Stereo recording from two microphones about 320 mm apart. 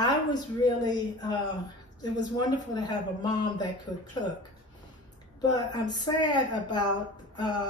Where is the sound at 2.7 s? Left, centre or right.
Centre.